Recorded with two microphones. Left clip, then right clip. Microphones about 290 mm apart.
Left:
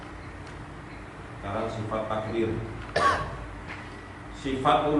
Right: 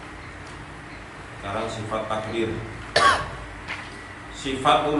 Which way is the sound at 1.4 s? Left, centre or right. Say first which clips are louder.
Right 3 dB; centre.